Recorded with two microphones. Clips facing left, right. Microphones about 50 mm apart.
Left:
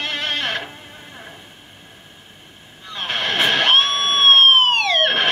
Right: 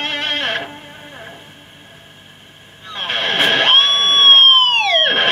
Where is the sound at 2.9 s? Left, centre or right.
Right.